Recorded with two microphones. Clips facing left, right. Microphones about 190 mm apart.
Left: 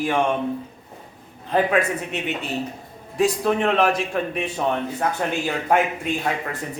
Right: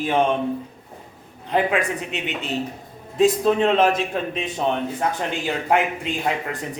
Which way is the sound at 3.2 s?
20° right (ahead or behind).